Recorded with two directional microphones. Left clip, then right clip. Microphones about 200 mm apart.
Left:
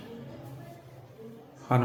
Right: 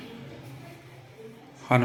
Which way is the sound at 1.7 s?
10° left (ahead or behind).